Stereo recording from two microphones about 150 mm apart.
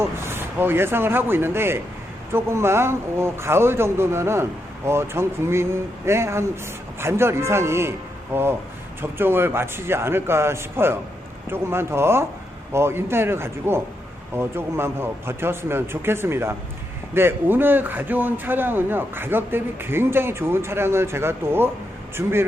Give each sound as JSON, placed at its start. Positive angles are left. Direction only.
{"t": 0.0, "sound": "a man's voice", "side_deg": -15}